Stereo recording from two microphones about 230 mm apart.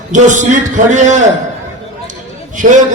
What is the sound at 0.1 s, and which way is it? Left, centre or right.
A man's voice, right.